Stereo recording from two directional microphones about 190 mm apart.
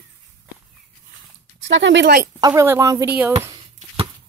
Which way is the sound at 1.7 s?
70° right (ahead or behind).